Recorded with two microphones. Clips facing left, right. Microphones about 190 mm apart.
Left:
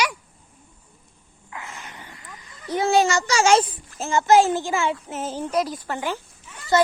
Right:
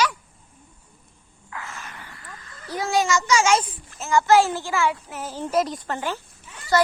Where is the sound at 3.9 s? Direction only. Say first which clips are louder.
Right 2 dB; 30° left (ahead or behind).